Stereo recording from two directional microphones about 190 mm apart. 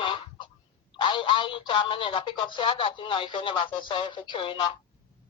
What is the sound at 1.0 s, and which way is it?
Speech, 25° left (ahead or behind).